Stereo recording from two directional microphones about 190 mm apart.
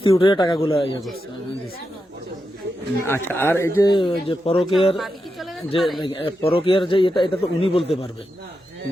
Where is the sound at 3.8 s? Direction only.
25° left (ahead or behind).